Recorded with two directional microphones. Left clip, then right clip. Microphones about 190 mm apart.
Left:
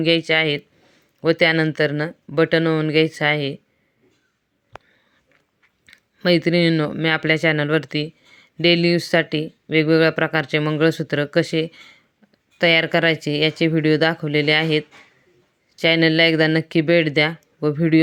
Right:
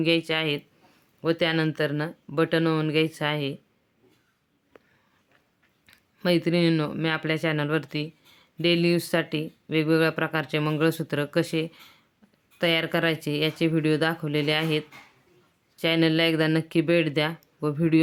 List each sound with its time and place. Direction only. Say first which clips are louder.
0.0 s speech: left 7 dB; 20° left (ahead or behind)
5.9 s speech: left 6 dB; 20° left (ahead or behind)